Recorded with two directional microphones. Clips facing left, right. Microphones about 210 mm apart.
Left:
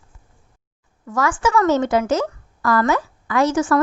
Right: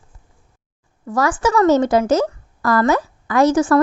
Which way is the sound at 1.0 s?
35° right (ahead or behind).